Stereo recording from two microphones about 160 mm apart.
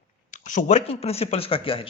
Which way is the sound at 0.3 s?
50° left (ahead or behind).